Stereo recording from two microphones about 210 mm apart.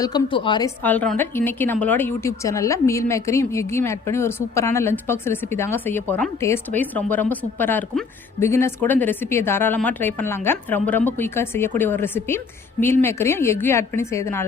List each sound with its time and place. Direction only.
0.0 s a woman's voice: 20° left (ahead or behind)
0.8 s a woman's voice: 10° left (ahead or behind)